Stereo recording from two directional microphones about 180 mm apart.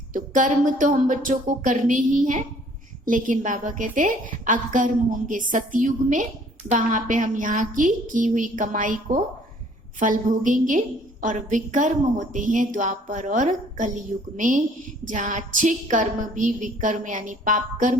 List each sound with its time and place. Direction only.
0.1 s a woman's voice: 45° right (ahead or behind)